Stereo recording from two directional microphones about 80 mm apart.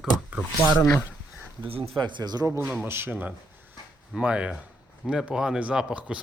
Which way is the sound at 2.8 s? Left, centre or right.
Right.